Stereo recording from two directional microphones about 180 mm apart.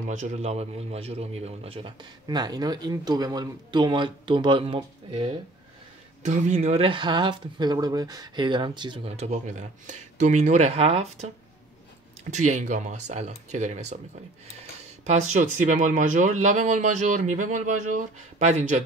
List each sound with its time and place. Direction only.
0.0 s a man's voice: 40° right (ahead or behind)
6.2 s speech: 40° right (ahead or behind)
12.3 s speech: 40° right (ahead or behind)
15.0 s speech: 40° right (ahead or behind)